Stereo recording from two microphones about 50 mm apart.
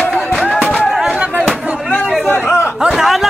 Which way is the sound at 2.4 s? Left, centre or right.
Left.